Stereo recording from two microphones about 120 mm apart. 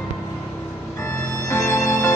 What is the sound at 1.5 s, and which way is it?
Music, 20° left (ahead or behind).